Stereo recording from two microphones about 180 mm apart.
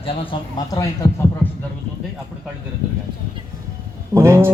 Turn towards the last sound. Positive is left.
turn(degrees=-15)  # may be behind; listen again after turning